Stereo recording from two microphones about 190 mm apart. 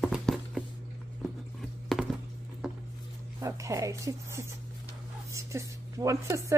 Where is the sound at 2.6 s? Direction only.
5° right (ahead or behind).